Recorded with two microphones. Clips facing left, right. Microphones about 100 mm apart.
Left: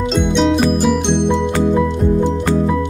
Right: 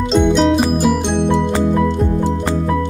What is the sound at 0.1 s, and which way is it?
Music, centre (ahead or behind).